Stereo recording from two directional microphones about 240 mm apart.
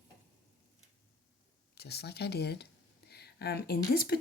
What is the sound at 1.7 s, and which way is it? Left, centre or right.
Speech, left.